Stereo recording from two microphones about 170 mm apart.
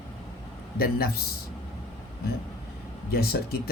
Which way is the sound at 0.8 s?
65° left (ahead or behind).